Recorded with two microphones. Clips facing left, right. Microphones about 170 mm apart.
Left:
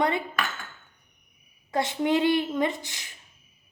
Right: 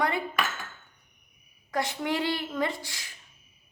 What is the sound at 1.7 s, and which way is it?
A woman's voice, 25° left (ahead or behind).